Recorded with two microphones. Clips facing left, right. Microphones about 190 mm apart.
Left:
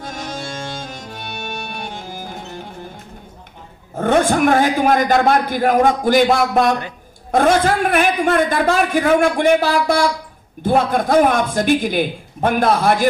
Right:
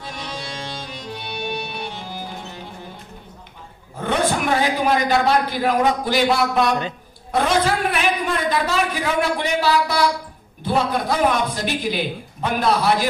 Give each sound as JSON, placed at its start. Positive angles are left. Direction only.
{"t": 0.0, "sound": "music", "side_deg": 45}
{"t": 3.9, "sound": "a man's voice", "side_deg": 50}